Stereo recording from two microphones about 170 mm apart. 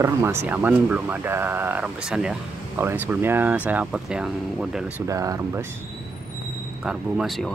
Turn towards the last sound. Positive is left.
turn(degrees=0)  # may be behind; listen again after turning